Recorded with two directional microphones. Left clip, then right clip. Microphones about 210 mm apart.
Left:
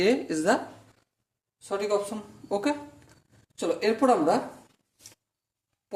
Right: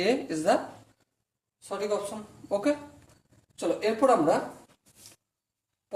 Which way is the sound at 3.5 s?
35° left (ahead or behind).